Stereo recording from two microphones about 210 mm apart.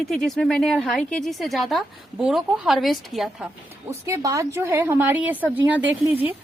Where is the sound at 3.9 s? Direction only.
15° right (ahead or behind).